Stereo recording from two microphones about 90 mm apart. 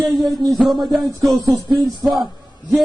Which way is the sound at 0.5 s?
Centre (ahead or behind).